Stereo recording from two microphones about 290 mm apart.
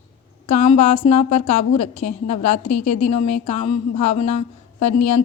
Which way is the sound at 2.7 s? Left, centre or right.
Left.